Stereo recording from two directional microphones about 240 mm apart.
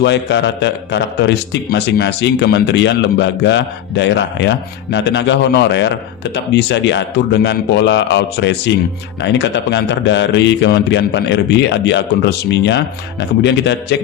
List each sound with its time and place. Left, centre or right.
0.0 s speech: left